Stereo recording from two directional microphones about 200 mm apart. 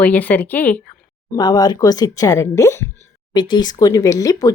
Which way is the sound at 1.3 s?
20° left (ahead or behind).